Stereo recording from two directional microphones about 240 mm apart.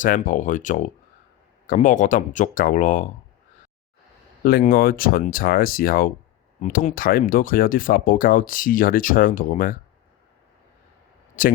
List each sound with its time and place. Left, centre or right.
0.0 s speech: left
4.4 s speech: left
11.4 s speech: left